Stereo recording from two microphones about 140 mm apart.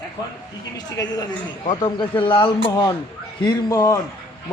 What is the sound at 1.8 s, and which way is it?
A man's voice, 35° left (ahead or behind).